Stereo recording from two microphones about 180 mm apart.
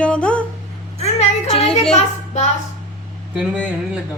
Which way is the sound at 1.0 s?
35° left (ahead or behind).